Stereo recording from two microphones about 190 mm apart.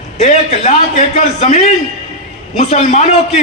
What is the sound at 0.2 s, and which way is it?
A man's voice, 35° left (ahead or behind).